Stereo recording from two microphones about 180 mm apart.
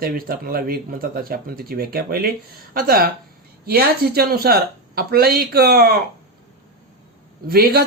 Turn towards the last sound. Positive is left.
turn(degrees=-55)  # may be behind; listen again after turning